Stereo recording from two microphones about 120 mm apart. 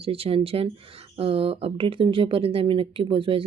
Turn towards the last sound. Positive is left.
turn(degrees=-45)  # may be behind; listen again after turning